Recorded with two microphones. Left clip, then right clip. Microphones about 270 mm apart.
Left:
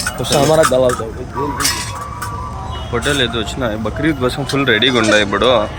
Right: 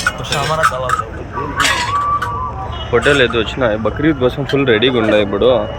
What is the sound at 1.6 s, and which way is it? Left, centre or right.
Speech, right.